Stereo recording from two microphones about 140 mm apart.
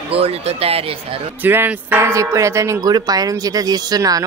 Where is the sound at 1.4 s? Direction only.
15° right (ahead or behind).